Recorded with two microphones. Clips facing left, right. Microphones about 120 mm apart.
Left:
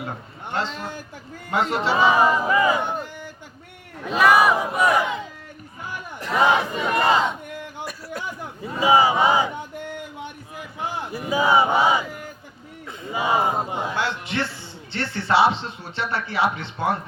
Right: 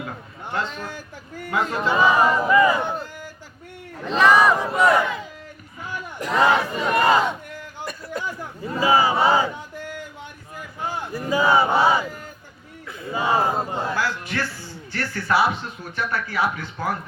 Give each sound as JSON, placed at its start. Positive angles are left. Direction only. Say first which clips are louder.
{"t": 0.5, "sound": "speech", "louder": "left 1 dB", "side_deg": 25}
{"t": 2.1, "sound": "a man's voice", "louder": "right 1 dB", "side_deg": 15}
{"t": 6.3, "sound": "a man's voice", "louder": "even", "side_deg": 15}
{"t": 7.9, "sound": "a sound", "louder": "right 2 dB", "side_deg": 5}
{"t": 8.6, "sound": "a man's voice", "louder": "left 1 dB", "side_deg": 20}
{"t": 11.1, "sound": "a man's voice", "louder": "even", "side_deg": 15}